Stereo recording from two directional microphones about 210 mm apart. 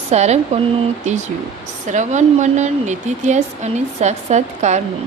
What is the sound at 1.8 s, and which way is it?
Speech, 35° right (ahead or behind).